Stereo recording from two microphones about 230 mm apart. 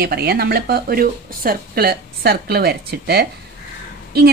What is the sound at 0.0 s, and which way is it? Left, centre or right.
A woman's voice, right.